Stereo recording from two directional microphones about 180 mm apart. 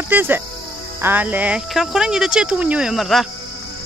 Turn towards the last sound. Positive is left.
turn(degrees=0)  # may be behind; listen again after turning